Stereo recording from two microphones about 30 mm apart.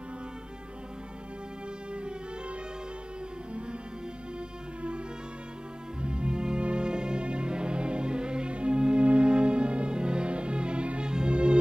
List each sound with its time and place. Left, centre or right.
6.0 s music: right